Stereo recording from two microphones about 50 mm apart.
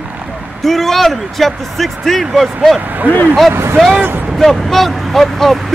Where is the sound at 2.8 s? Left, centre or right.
Right.